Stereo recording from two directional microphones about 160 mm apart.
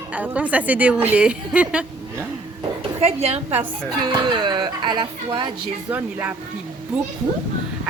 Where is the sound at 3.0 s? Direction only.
40° right (ahead or behind).